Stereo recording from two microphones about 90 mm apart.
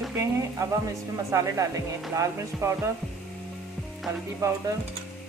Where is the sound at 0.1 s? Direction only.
35° right (ahead or behind).